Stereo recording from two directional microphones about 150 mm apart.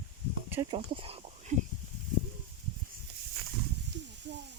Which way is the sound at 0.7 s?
40° right (ahead or behind).